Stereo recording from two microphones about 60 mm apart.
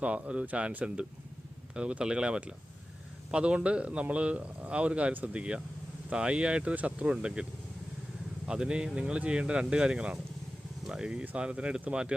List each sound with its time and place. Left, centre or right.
0.0 s speech: centre
8.4 s speech: centre